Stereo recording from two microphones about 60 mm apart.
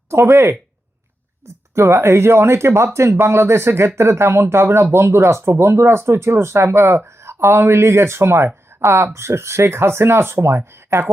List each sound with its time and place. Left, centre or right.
0.1 s speech: right
1.7 s speech: right